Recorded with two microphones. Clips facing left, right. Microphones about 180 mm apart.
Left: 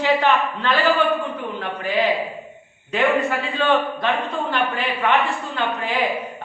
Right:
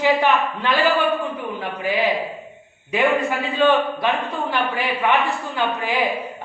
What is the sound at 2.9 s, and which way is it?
A man's voice, 10° right (ahead or behind).